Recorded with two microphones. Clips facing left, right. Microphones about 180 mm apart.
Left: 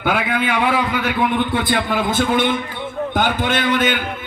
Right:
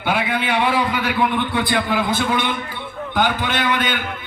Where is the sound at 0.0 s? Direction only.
50° left (ahead or behind).